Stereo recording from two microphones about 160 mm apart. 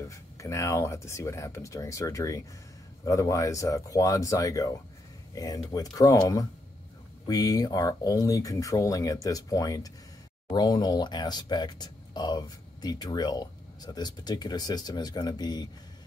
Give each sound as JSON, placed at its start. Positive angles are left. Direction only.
{"t": 0.0, "sound": "speech", "side_deg": 20}